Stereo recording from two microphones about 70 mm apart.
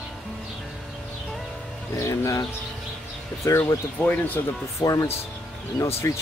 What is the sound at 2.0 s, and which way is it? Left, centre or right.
Speech, left.